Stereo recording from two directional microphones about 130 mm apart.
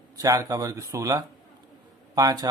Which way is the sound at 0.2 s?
25° right (ahead or behind).